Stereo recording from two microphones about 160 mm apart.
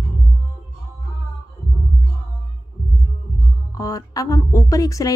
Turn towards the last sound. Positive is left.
turn(degrees=20)  # may be behind; listen again after turning